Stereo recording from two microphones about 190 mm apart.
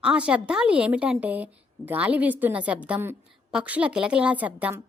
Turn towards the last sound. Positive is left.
turn(degrees=-10)  # may be behind; listen again after turning